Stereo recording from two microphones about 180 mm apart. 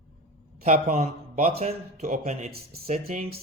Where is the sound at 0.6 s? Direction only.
40° right (ahead or behind).